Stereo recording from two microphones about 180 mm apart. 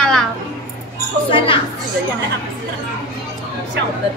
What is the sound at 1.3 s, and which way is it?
Speech, 30° left (ahead or behind).